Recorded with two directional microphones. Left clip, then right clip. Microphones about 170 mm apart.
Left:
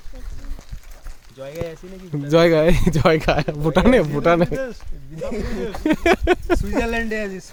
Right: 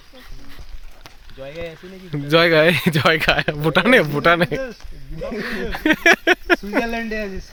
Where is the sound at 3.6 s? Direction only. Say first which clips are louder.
Right 1 dB; 15° left (ahead or behind).